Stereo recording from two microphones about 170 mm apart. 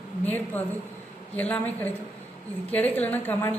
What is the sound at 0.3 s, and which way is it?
A woman's voice, 10° left (ahead or behind).